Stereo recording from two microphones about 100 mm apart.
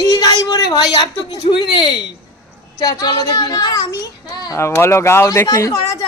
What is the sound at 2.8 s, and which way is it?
Speech, 40° left (ahead or behind).